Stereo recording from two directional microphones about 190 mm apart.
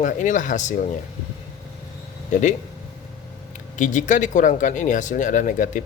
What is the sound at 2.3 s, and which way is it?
Speech, 40° left (ahead or behind).